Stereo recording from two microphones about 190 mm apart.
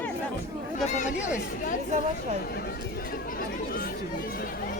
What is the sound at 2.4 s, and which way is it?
Chatter, 55° left (ahead or behind).